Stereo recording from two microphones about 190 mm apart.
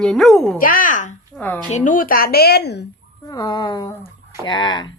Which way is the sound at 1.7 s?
40° left (ahead or behind).